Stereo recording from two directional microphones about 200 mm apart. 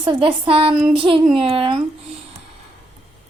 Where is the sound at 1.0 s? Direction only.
25° right (ahead or behind).